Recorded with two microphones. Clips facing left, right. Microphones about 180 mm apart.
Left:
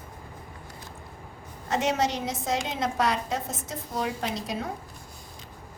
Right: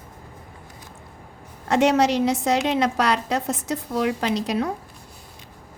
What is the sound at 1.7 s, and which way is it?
A woman's voice, 75° right (ahead or behind).